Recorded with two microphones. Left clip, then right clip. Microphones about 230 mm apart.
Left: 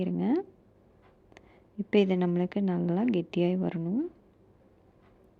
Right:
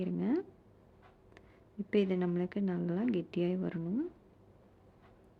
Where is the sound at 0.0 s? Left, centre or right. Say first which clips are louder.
Left 5 dB; centre.